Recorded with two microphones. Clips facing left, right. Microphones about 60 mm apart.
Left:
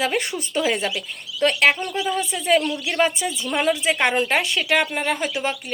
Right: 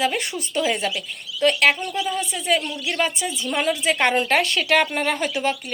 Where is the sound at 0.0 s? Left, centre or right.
Left.